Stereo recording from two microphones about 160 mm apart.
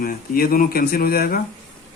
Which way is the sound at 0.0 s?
65° left (ahead or behind).